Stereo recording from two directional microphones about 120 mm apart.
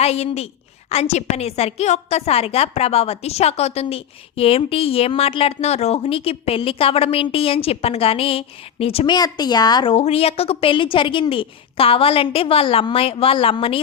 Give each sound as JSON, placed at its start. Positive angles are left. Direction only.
{"t": 0.0, "sound": "a woman's voice", "side_deg": 60}
{"t": 9.0, "sound": "speech", "side_deg": 35}
{"t": 9.9, "sound": "a woman's voice", "side_deg": 55}